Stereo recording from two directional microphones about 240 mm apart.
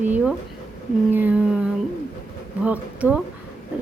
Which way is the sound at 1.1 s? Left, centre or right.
Centre.